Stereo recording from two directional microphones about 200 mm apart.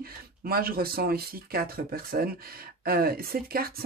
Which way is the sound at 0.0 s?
50° right (ahead or behind).